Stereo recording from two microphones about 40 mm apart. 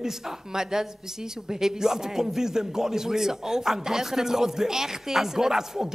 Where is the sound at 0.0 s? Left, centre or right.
Centre.